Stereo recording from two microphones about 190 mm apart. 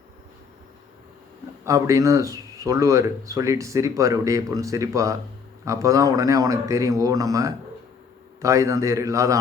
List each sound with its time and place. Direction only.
1.6 s speech: 15° right (ahead or behind)